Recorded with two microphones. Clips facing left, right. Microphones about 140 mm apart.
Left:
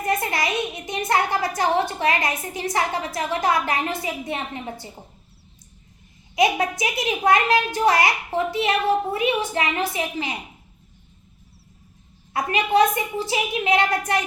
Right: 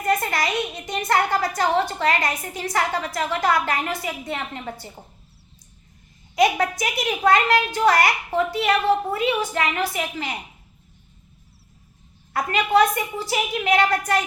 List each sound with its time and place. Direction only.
0.0 s a sound: 20° left (ahead or behind)
1.9 s a woman's voice: 20° left (ahead or behind)
6.3 s a woman's voice: 20° left (ahead or behind)
12.3 s a woman's voice: 20° left (ahead or behind)